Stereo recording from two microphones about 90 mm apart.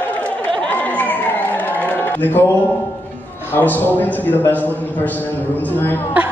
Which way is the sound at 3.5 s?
20° left (ahead or behind).